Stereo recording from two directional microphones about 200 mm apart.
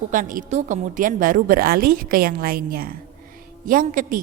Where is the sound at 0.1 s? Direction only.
40° right (ahead or behind).